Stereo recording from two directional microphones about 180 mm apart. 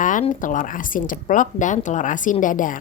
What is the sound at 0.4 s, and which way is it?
A woman's voice, 45° left (ahead or behind).